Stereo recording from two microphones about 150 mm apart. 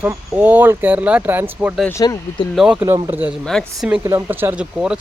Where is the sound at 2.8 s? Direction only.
15° right (ahead or behind).